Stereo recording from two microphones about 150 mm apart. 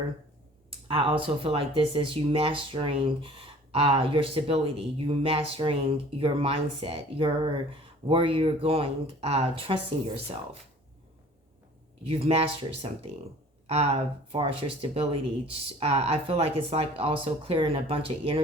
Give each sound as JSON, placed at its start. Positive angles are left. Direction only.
{"t": 0.9, "sound": "speech", "side_deg": -35}
{"t": 12.0, "sound": "speech", "side_deg": -45}